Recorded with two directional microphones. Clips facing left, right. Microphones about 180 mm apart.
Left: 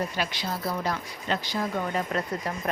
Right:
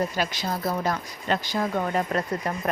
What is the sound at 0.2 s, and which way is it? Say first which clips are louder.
Speech: right 3 dB; 45° right (ahead or behind).